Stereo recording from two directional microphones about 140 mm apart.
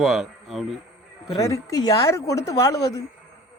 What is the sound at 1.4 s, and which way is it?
A woman's voice, 20° left (ahead or behind).